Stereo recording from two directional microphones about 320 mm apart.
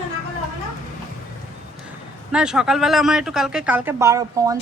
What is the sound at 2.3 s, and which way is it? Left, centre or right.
Speech, centre.